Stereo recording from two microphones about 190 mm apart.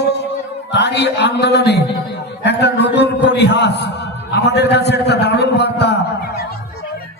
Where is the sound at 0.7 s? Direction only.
60° left (ahead or behind).